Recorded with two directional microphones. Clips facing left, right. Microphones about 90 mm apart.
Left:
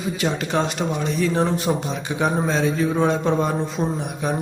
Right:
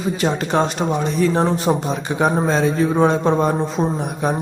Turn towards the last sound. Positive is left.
turn(degrees=-40)  # may be behind; listen again after turning